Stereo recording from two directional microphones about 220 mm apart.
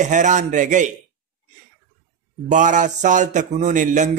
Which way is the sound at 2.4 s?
35° right (ahead or behind).